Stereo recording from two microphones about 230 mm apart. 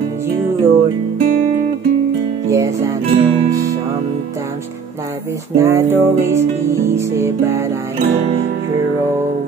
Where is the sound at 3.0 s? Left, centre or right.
Right.